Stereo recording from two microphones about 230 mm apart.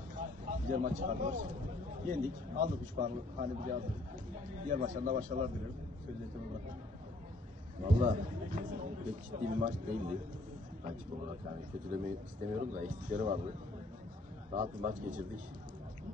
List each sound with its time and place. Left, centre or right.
0.1 s a sound: right
2.0 s a man's voice: right
7.8 s a man's voice: right
11.9 s a man's voice: right
14.5 s a man's voice: right